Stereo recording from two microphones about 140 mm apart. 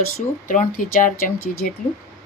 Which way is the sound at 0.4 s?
65° left (ahead or behind).